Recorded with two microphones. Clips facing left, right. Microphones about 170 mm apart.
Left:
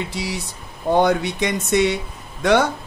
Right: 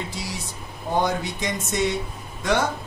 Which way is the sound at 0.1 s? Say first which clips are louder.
Left 5 dB; 70° left (ahead or behind).